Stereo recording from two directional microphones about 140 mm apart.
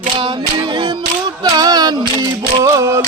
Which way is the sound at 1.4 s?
25° right (ahead or behind).